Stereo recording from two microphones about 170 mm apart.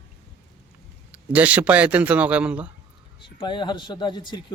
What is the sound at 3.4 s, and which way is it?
A man's voice, 30° left (ahead or behind).